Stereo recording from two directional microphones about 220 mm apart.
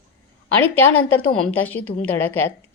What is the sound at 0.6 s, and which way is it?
A woman's voice, 5° left (ahead or behind).